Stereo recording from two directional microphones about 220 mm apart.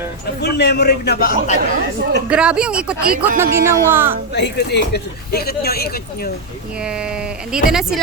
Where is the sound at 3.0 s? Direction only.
40° right (ahead or behind).